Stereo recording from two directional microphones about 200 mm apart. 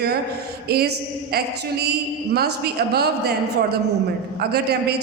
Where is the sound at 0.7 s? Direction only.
50° right (ahead or behind).